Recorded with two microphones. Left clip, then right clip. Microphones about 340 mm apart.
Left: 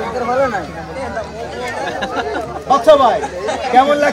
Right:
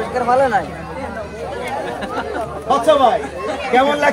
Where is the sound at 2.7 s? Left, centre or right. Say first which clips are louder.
Left 3 dB; centre.